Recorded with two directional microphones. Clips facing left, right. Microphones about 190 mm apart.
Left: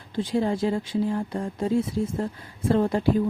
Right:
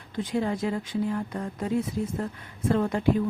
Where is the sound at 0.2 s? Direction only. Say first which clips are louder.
Left 3 dB; 30° left (ahead or behind).